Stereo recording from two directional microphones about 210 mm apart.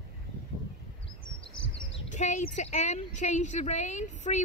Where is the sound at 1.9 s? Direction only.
35° left (ahead or behind).